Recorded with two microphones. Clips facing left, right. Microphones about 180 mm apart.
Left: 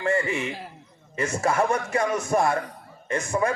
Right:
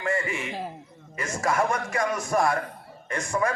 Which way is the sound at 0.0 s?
25° left (ahead or behind).